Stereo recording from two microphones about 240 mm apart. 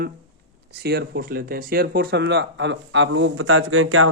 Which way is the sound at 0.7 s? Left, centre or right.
Right.